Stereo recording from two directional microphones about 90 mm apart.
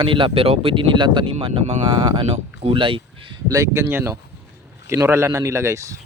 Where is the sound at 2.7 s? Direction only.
75° right (ahead or behind).